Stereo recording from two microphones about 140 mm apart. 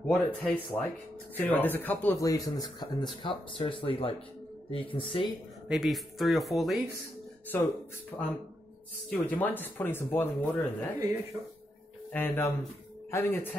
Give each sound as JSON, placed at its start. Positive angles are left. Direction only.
{"t": 0.0, "sound": "speech", "side_deg": 10}
{"t": 2.1, "sound": "speech", "side_deg": 25}
{"t": 5.7, "sound": "speech", "side_deg": 0}
{"t": 7.5, "sound": "speech", "side_deg": 15}
{"t": 9.1, "sound": "speech", "side_deg": 15}
{"t": 12.1, "sound": "speech", "side_deg": 15}